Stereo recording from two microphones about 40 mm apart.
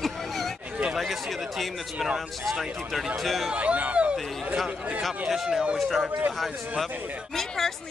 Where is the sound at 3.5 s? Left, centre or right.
Right.